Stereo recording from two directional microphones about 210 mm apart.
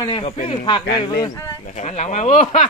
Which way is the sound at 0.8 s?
50° left (ahead or behind).